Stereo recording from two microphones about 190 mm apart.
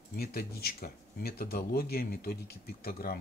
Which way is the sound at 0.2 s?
55° left (ahead or behind).